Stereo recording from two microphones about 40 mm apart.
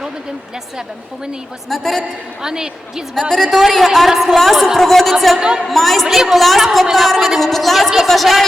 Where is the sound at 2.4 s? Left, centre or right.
Centre.